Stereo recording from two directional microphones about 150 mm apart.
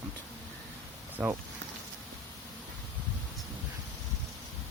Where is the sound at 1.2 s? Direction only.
10° right (ahead or behind).